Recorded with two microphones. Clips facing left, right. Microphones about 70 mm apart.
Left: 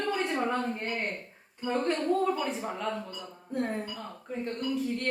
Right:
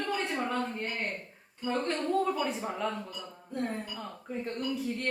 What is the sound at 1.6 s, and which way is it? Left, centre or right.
Speech, centre.